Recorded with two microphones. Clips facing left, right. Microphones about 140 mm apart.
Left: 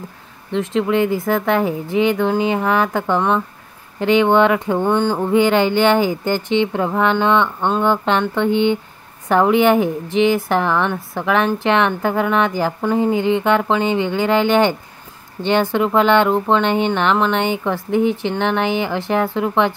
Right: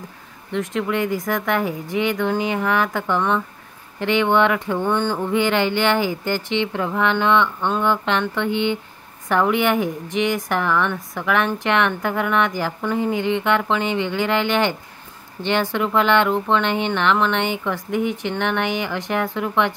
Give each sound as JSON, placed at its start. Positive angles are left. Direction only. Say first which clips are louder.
{"t": 0.5, "sound": "a woman's voice", "louder": "left 5 dB", "side_deg": 30}